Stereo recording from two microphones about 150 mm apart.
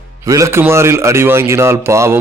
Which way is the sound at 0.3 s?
20° right (ahead or behind).